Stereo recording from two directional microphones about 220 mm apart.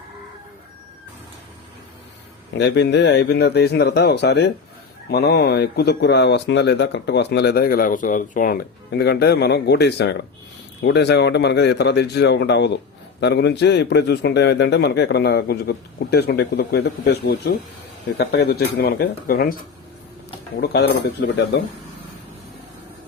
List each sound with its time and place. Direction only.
2.5 s speech: 50° left (ahead or behind)
20.6 s speech: 50° left (ahead or behind)